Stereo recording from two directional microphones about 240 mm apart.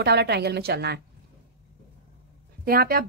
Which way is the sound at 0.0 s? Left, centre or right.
Right.